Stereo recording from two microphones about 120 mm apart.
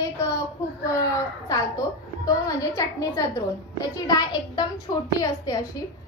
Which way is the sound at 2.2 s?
30° left (ahead or behind).